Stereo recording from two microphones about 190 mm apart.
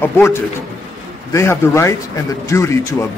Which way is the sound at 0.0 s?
15° left (ahead or behind).